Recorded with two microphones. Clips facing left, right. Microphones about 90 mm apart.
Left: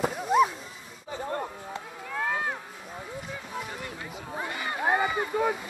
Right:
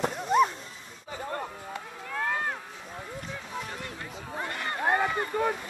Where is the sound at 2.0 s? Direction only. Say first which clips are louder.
Left 1 dB; 5° left (ahead or behind).